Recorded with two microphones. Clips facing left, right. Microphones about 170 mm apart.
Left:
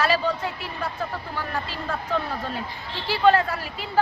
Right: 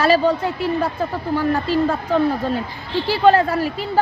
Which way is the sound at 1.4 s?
35° right (ahead or behind).